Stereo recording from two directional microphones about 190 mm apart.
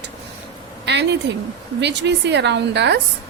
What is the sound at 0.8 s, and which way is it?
A woman's voice, 65° right (ahead or behind).